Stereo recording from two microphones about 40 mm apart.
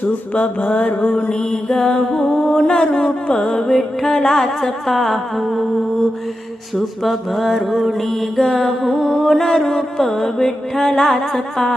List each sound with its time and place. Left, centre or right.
0.0 s mantra: left
3.3 s music: centre
6.7 s mantra: centre
9.4 s music: centre